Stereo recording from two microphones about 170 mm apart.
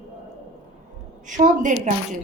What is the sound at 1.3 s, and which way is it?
Speech, 45° right (ahead or behind).